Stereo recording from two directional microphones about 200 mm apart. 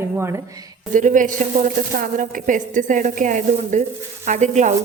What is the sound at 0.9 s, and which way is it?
A woman's voice, 40° right (ahead or behind).